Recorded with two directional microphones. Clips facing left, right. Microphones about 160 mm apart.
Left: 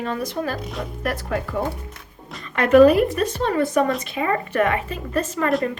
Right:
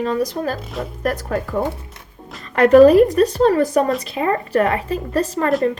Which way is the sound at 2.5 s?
35° right (ahead or behind).